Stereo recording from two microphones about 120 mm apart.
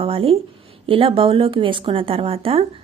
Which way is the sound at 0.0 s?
50° right (ahead or behind).